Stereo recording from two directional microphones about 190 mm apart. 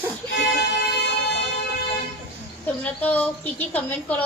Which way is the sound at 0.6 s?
65° left (ahead or behind).